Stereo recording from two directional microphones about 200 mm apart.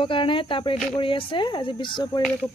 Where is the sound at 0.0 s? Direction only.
25° left (ahead or behind).